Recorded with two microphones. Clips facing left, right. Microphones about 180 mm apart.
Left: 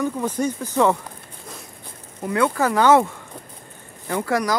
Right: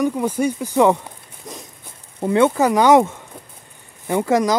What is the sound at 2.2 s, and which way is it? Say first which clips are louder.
Speech: right 5 dB; 25° right (ahead or behind).